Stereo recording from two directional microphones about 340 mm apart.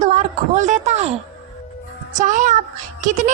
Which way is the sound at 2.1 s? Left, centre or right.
Right.